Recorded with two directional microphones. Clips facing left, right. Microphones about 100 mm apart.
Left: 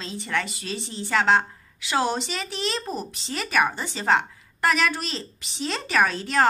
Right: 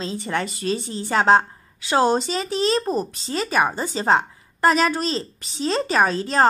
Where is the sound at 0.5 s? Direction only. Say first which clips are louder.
Right 8 dB; 45° right (ahead or behind).